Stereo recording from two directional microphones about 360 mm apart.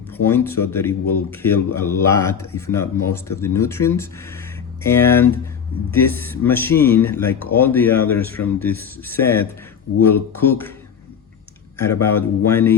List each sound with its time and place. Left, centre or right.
0.3 s speech: centre
11.8 s speech: centre